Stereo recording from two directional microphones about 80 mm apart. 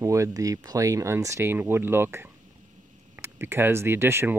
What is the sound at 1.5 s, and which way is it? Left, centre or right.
Speech, right.